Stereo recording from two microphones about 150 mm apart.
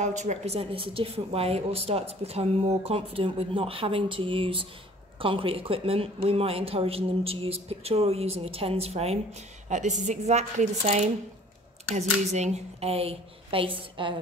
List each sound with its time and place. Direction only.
0.0 s a woman's voice: 50° right (ahead or behind)
12.3 s a woman's voice: 50° right (ahead or behind)